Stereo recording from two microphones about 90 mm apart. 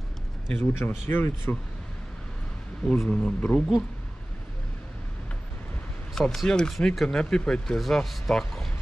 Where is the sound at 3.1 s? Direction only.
10° left (ahead or behind).